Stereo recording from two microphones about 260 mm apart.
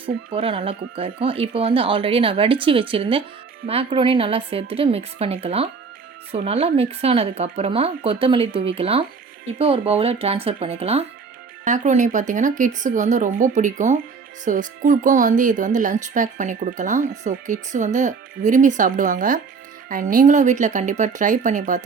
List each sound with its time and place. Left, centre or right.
0.0 s speech: right